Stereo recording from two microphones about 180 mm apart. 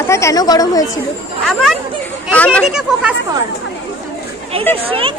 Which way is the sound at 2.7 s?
5° right (ahead or behind).